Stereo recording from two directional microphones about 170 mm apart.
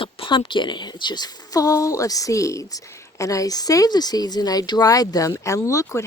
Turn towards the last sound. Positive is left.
turn(degrees=15)  # may be behind; listen again after turning